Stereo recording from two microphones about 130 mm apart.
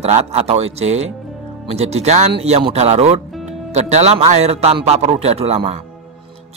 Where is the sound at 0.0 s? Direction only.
55° right (ahead or behind).